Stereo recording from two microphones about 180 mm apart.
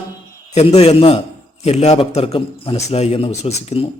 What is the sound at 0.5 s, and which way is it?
A man's voice, 35° left (ahead or behind).